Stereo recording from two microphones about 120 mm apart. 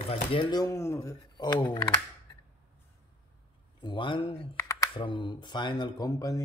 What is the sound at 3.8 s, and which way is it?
Speech, 40° left (ahead or behind).